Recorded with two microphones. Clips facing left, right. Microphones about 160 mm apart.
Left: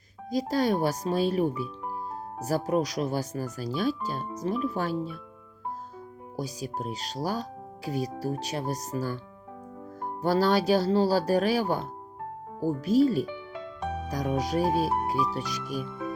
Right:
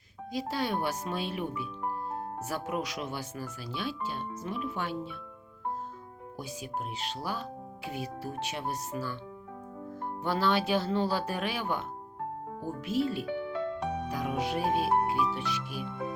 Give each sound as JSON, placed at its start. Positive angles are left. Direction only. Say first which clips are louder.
{"t": 0.3, "sound": "speech", "louder": "left 7 dB", "side_deg": 40}
{"t": 6.3, "sound": "speech", "louder": "left 5 dB", "side_deg": 40}
{"t": 13.5, "sound": "music", "louder": "right 6 dB", "side_deg": -60}
{"t": 14.1, "sound": "speech", "louder": "left 6 dB", "side_deg": 40}